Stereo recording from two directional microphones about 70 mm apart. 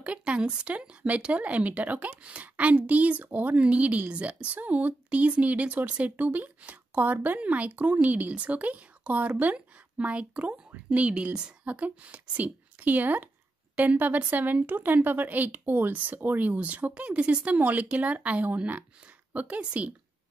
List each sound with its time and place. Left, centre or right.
0.0 s a woman's voice: centre